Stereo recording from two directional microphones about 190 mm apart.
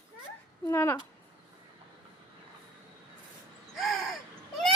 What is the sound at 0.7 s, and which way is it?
Speech, 15° left (ahead or behind).